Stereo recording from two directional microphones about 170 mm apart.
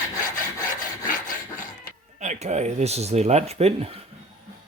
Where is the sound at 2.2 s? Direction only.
40° right (ahead or behind).